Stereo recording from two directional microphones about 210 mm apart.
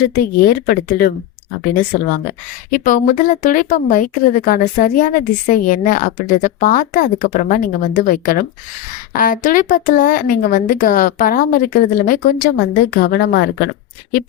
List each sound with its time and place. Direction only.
0.1 s speech: 45° left (ahead or behind)
2.6 s speech: 40° left (ahead or behind)